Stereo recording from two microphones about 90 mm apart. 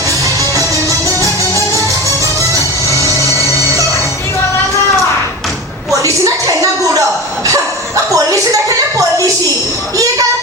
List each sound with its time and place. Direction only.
0.5 s music: 40° right (ahead or behind)
5.9 s a sound: 40° right (ahead or behind)
7.4 s bow-wow: 35° right (ahead or behind)